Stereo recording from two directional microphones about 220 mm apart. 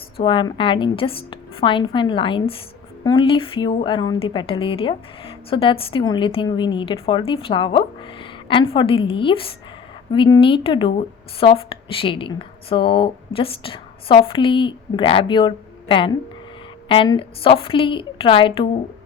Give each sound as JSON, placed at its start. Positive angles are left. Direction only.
{"t": 0.2, "sound": "a woman's voice", "side_deg": 20}